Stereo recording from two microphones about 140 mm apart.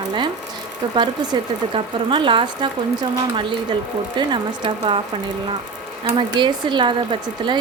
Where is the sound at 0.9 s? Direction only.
35° right (ahead or behind).